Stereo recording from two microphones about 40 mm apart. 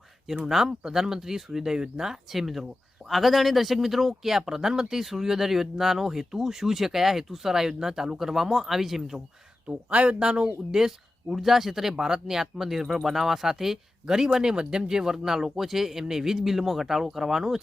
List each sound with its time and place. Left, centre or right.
0.4 s speech: centre
2.3 s speech: centre
9.6 s speech: right
10.4 s speech: centre